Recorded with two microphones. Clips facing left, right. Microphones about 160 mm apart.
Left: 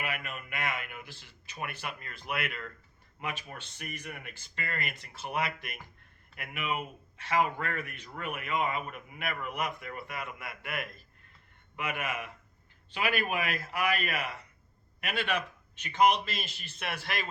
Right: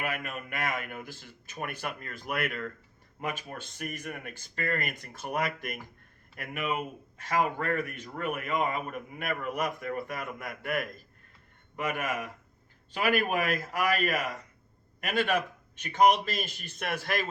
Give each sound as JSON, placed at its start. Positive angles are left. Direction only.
{"t": 0.0, "sound": "speech", "side_deg": -45}